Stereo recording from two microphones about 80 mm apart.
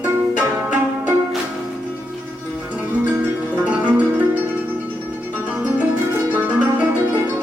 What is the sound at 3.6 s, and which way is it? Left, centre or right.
Music, centre.